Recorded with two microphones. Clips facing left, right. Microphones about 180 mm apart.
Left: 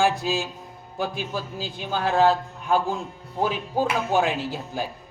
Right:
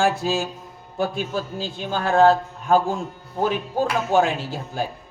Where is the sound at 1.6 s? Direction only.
45° right (ahead or behind).